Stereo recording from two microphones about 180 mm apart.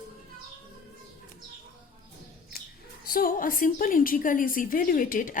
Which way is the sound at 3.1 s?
50° left (ahead or behind).